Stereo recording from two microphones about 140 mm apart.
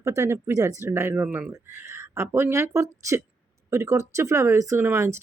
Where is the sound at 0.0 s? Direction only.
20° right (ahead or behind).